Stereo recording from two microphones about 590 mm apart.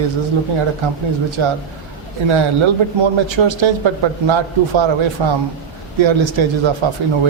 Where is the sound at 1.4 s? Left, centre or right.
Right.